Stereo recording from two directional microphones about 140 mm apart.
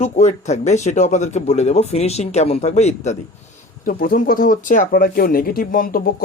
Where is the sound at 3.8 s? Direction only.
90° left.